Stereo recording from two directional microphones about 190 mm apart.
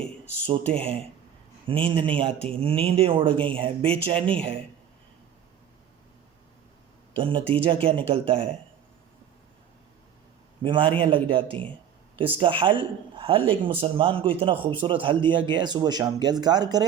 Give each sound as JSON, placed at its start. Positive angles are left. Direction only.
{"t": 0.4, "sound": "speech", "side_deg": -30}
{"t": 7.2, "sound": "speech", "side_deg": -25}
{"t": 10.6, "sound": "speech", "side_deg": -25}